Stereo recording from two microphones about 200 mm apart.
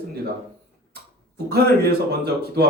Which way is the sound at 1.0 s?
55° right (ahead or behind).